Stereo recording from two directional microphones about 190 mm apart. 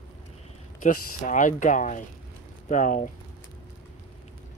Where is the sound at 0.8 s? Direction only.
40° left (ahead or behind).